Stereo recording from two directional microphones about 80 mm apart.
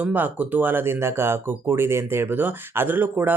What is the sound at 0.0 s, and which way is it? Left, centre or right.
Speech, right.